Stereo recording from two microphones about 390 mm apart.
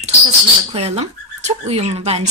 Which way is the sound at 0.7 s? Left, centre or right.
Centre.